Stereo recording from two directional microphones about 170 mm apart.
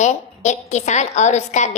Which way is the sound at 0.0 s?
45° left (ahead or behind).